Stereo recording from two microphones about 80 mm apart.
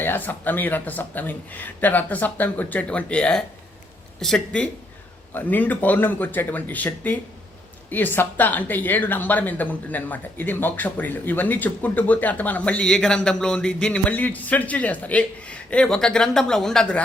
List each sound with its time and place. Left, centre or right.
0.0 s speech: left; by 4.7 s centre
5.3 s speech: left